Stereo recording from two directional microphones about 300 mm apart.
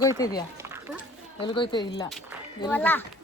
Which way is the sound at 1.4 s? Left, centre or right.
Centre.